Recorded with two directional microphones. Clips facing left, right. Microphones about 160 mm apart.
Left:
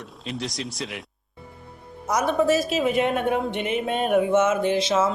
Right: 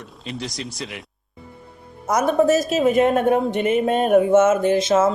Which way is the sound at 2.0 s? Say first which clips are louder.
Right 4 dB; 50° right (ahead or behind).